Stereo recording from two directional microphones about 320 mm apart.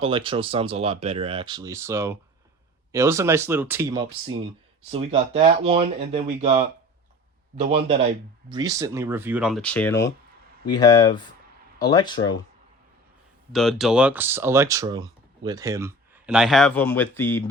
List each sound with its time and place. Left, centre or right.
0.0 s speech: centre
13.5 s speech: centre